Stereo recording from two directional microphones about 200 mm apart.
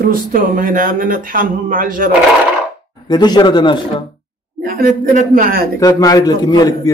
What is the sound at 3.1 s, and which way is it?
Speech, 20° left (ahead or behind).